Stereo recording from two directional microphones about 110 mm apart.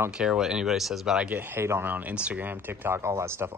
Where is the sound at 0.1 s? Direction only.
5° right (ahead or behind).